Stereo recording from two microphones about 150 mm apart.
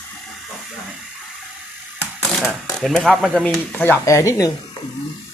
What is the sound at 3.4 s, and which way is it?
Speech, 10° left (ahead or behind).